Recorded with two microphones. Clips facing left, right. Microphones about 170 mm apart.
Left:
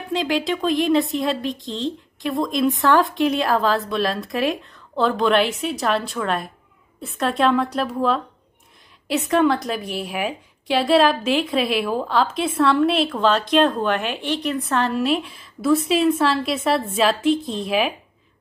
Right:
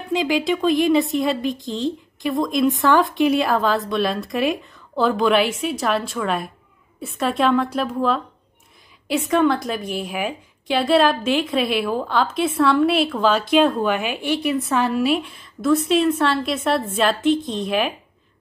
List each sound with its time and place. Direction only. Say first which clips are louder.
0.1 s a woman's voice: right 2 dB; centre (ahead or behind)